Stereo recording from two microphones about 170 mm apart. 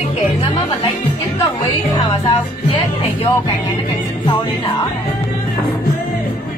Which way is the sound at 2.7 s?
15° left (ahead or behind).